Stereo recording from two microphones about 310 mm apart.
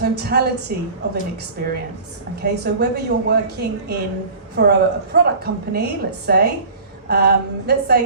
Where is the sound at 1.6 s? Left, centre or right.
Right.